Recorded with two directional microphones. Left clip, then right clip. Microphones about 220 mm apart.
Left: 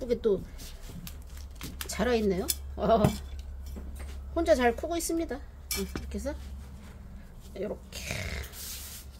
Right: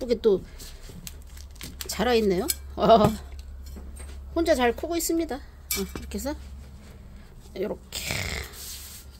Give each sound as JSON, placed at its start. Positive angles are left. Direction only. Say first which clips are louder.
{"t": 0.0, "sound": "speech", "louder": "right 5 dB", "side_deg": -40}
{"t": 1.9, "sound": "speech", "louder": "right 5 dB", "side_deg": -35}
{"t": 4.3, "sound": "speech", "louder": "right 2 dB", "side_deg": -30}
{"t": 7.5, "sound": "a sound", "louder": "right 5 dB", "side_deg": -40}